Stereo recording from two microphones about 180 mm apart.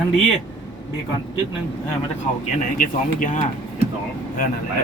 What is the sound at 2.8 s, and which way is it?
Speech, 45° left (ahead or behind).